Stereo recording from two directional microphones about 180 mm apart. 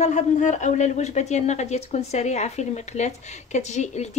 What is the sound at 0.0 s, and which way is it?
A woman's voice, 40° left (ahead or behind).